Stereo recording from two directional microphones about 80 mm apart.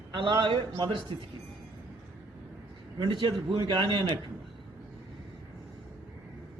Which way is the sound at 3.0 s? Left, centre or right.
Right.